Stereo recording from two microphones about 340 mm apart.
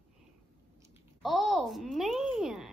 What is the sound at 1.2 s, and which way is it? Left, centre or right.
Speech, centre.